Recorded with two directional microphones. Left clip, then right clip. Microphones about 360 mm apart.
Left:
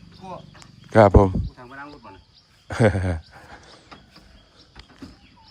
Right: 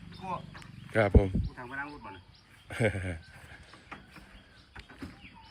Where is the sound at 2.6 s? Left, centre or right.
Left.